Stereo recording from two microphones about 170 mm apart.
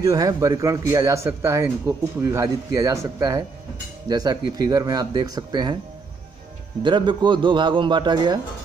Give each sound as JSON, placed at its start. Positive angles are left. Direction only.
{"t": 0.0, "sound": "speech", "side_deg": -20}
{"t": 6.8, "sound": "speech", "side_deg": -25}